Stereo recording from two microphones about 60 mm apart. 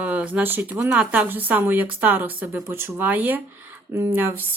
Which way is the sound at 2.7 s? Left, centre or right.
Right.